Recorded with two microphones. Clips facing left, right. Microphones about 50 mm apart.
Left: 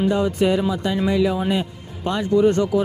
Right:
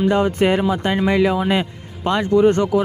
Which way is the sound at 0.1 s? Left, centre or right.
Right.